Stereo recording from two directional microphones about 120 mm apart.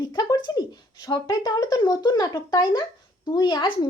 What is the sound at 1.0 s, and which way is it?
A woman's voice, 35° left (ahead or behind).